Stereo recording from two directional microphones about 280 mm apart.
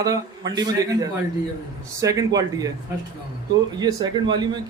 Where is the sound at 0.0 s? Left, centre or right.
Centre.